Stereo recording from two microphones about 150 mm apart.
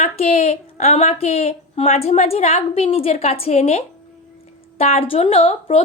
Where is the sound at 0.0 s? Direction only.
45° left (ahead or behind).